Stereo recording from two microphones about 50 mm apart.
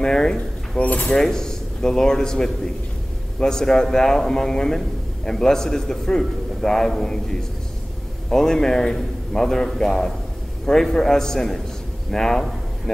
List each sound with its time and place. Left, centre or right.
0.0 s a sound: centre
0.7 s speech: left
1.1 s a man's voice: centre